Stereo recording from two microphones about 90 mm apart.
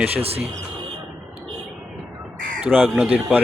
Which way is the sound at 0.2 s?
90° right.